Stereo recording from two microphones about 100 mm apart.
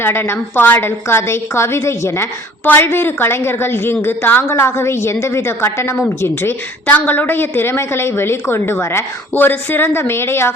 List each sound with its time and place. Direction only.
0.0 s a woman's voice: 25° left (ahead or behind)